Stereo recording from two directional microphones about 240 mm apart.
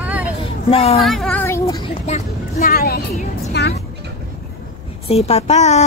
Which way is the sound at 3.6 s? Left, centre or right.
Left.